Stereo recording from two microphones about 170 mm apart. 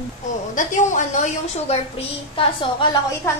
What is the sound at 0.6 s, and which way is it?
A woman's voice, 45° left (ahead or behind).